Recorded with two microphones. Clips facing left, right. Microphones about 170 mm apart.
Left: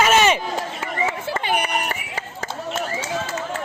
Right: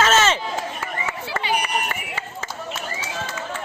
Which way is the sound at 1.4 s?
50° left (ahead or behind).